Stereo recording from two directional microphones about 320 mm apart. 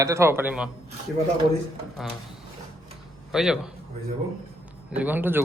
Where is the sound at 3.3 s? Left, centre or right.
Centre.